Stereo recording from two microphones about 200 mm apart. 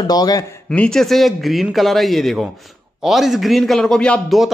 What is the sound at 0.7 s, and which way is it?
A man's voice, 5° left (ahead or behind).